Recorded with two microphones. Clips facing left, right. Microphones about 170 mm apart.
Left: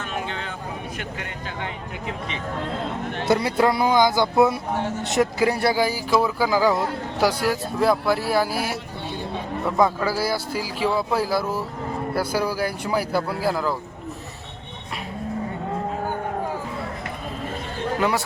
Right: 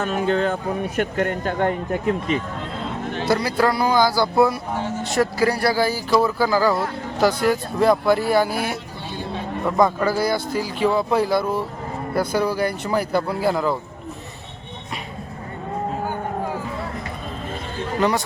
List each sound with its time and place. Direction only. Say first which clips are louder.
0.0 s speech: right 10 dB; 45° right (ahead or behind)
3.2 s speech: even; 20° left (ahead or behind); by 13.7 s centre (ahead or behind)